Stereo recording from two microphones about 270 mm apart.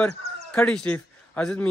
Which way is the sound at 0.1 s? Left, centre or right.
Right.